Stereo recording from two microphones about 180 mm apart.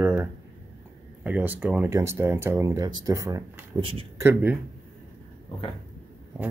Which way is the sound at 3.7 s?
30° right (ahead or behind).